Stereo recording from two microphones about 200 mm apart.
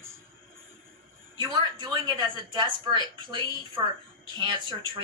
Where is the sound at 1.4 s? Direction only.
20° right (ahead or behind).